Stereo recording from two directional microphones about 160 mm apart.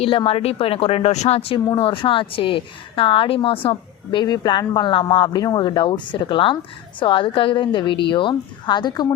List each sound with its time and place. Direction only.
0.0 s a woman's voice: 35° left (ahead or behind)